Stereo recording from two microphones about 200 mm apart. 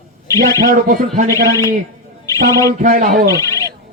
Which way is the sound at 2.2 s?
15° left (ahead or behind).